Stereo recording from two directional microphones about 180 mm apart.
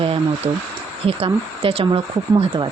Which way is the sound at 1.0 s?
30° right (ahead or behind).